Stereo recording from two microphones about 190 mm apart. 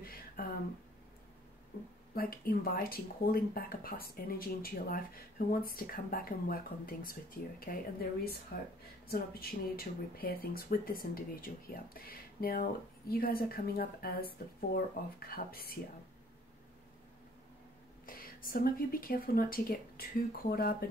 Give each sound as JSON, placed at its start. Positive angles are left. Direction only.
{"t": 0.0, "sound": "a sound", "side_deg": 50}
{"t": 2.1, "sound": "speech", "side_deg": 50}
{"t": 18.0, "sound": "speech", "side_deg": 50}